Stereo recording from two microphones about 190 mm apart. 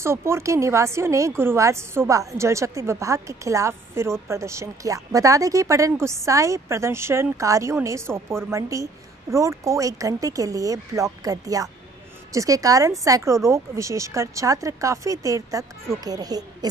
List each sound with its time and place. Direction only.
0.0 s a woman's voice: 15° right (ahead or behind)